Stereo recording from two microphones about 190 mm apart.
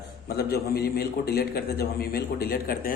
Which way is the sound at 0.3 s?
55° left (ahead or behind).